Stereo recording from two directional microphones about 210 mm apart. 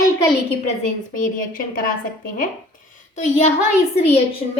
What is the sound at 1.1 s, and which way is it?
Speech, 40° left (ahead or behind).